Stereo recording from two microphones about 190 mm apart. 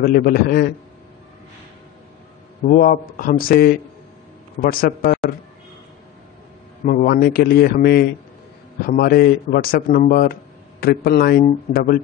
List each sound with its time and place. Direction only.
0.0 s a man's voice: 50° left (ahead or behind)
2.6 s a man's voice: 50° left (ahead or behind)
6.8 s a man's voice: 45° left (ahead or behind)